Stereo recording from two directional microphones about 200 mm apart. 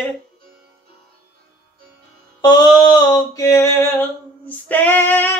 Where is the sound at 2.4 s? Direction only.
20° left (ahead or behind).